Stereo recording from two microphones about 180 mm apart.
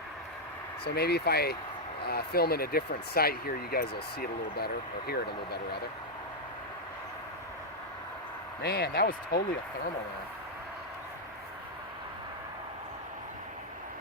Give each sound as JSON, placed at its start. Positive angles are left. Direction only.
{"t": 0.9, "sound": "speech", "side_deg": 65}
{"t": 8.6, "sound": "speech", "side_deg": 60}